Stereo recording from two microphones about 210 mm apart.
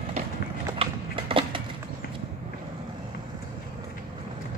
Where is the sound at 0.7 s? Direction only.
25° right (ahead or behind).